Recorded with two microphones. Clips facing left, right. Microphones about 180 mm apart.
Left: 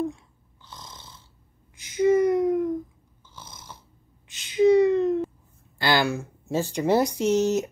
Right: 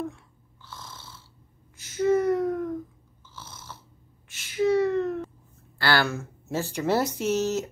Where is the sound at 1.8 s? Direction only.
15° left (ahead or behind).